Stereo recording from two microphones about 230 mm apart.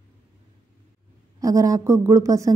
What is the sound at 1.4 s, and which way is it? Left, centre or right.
Speech, centre.